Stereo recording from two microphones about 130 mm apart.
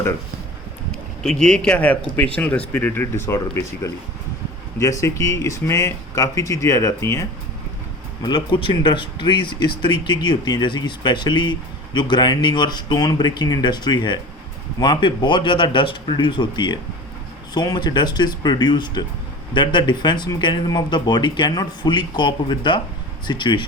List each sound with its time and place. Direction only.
1.2 s speech: 5° left (ahead or behind); by 7.3 s 25° left (ahead or behind)
8.2 s speech: 35° left (ahead or behind)